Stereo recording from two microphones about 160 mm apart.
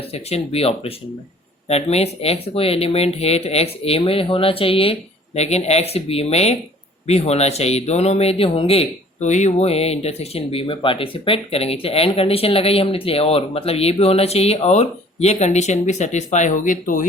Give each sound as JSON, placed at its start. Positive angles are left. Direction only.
{"t": 0.1, "sound": "speech", "side_deg": 40}